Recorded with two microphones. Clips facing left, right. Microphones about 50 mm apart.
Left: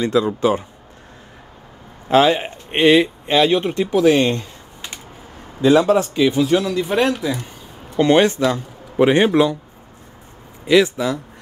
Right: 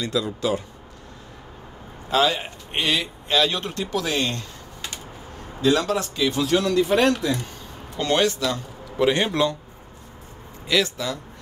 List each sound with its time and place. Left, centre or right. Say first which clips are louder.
0.0 s speech: left 8 dB; left
2.0 s a man's voice: left 7 dB; left; by 7.4 s centre
8.0 s a man's voice: left 7 dB; left
10.7 s a man's voice: left 8 dB; centre